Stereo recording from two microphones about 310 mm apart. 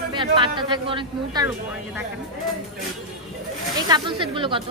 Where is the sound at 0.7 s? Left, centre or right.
Centre.